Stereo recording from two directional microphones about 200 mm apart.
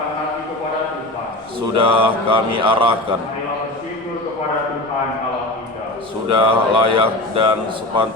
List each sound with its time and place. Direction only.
1.7 s mantra: 25° right (ahead or behind)
6.3 s mantra: 25° right (ahead or behind)